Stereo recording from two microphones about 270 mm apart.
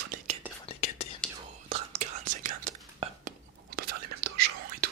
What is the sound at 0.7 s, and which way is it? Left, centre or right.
Whispering, left.